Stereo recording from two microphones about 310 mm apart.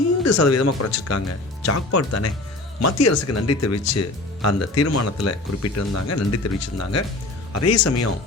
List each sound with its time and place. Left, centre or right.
0.3 s speech: left